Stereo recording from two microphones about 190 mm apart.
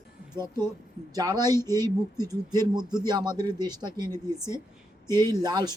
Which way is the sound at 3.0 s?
20° right (ahead or behind).